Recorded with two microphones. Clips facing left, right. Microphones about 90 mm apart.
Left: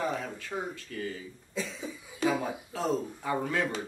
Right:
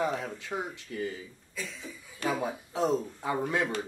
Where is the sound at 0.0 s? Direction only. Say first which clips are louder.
Right 2 dB; 15° right (ahead or behind).